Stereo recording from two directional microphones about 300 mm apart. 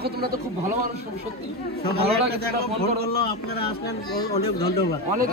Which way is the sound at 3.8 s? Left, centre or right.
Centre.